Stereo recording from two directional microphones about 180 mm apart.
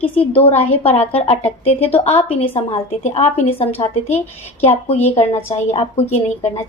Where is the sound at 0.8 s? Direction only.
35° left (ahead or behind).